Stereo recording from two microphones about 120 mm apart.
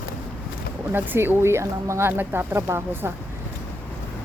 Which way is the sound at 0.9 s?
15° right (ahead or behind).